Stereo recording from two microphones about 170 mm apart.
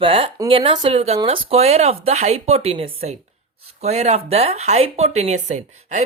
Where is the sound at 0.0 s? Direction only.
30° right (ahead or behind).